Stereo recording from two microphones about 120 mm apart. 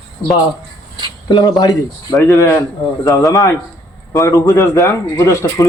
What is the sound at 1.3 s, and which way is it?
Speech, 35° left (ahead or behind).